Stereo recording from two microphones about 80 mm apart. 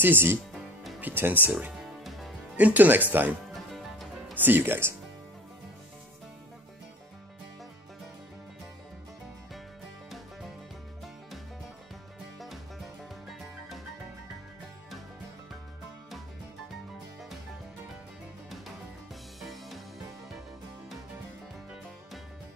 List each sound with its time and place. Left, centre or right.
0.0 s speech: right
1.8 s music: centre
2.5 s speech: right
3.5 s music: centre
4.4 s speech: right
19.4 s music: centre